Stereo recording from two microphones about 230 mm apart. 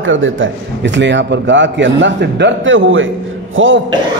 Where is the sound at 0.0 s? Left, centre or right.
Right.